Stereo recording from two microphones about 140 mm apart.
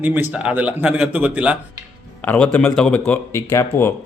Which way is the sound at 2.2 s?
15° left (ahead or behind).